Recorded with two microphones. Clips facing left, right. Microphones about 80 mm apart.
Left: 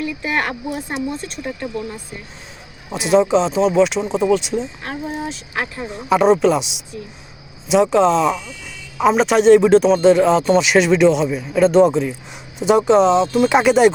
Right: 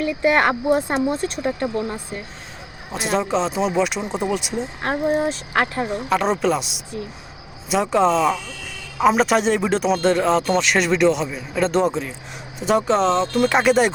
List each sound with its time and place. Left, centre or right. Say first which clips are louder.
0.2 s speech: right 7 dB; right
0.7 s speech: right 5 dB; right
2.9 s a man's voice: left 7 dB; centre
4.6 s speech: right 5 dB; right
6.1 s a man's voice: left 7 dB; centre